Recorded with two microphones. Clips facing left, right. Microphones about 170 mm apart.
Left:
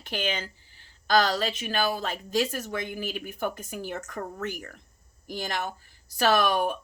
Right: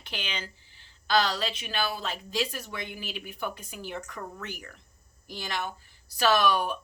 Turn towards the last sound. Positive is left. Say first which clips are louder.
# left 1 dB
turn(degrees=45)  # may be behind; listen again after turning